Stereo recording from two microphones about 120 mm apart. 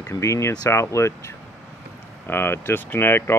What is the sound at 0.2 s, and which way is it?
Speech, 25° left (ahead or behind).